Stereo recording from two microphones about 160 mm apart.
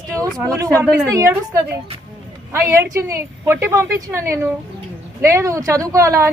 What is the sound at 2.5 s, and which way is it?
A woman's voice, 15° right (ahead or behind).